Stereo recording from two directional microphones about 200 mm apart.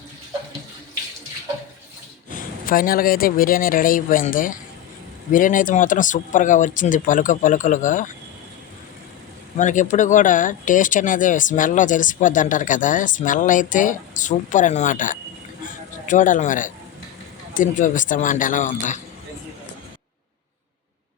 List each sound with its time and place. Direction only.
2.3 s a woman's voice: 45° left (ahead or behind)
9.6 s speech: 40° left (ahead or behind)